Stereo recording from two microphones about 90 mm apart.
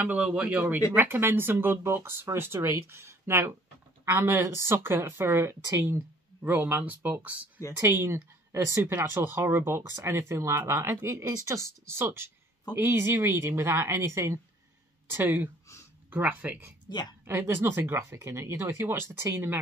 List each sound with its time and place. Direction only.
0.0 s a man's voice: 10° right (ahead or behind)
7.7 s speech: 30° right (ahead or behind)